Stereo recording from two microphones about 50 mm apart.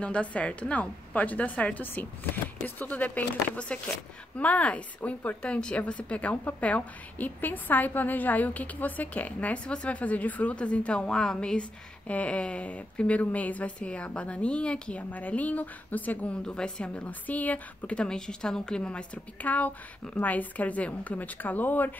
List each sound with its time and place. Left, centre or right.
0.0 s a woman's voice: left
3.5 s a woman's voice: left
15.0 s a woman's voice: left
16.4 s a woman's voice: centre
17.9 s a woman's voice: centre; by 21.9 s left